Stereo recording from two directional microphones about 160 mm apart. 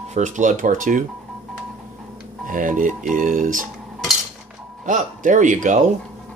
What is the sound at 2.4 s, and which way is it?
Speech, 55° right (ahead or behind).